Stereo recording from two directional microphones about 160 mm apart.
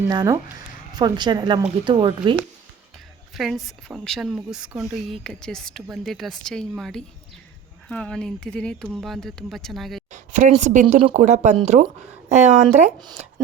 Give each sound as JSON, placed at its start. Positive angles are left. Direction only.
{"t": 0.1, "sound": "a woman's voice", "side_deg": -25}
{"t": 3.3, "sound": "a woman's voice", "side_deg": 0}
{"t": 10.1, "sound": "speech", "side_deg": -50}